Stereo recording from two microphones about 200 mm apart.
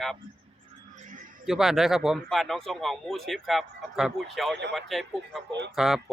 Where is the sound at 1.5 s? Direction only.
Centre (ahead or behind).